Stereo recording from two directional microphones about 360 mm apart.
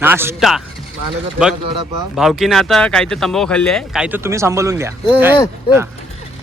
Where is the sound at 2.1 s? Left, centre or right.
Centre.